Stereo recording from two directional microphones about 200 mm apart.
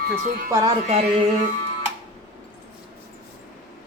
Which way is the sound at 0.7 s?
30° right (ahead or behind).